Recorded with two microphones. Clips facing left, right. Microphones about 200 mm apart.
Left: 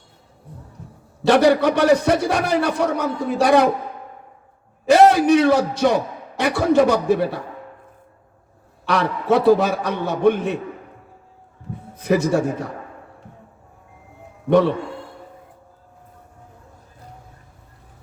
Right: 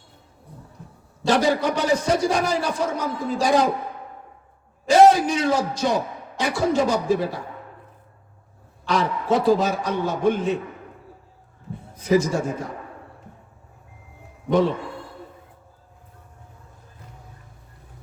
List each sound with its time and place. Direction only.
1.3 s a man's voice: 60° left (ahead or behind)
4.9 s a sound: 60° left (ahead or behind)
8.9 s a man's voice: 60° left (ahead or behind)
11.9 s a man's voice: 60° left (ahead or behind)